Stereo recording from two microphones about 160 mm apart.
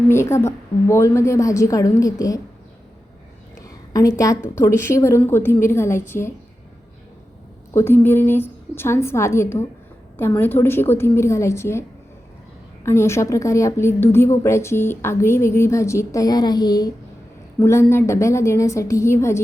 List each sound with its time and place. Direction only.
0.1 s a woman's voice: 15° left (ahead or behind)
3.6 s a sound: 20° left (ahead or behind)
4.5 s a woman's voice: 15° left (ahead or behind)
7.7 s a woman's voice: 15° left (ahead or behind)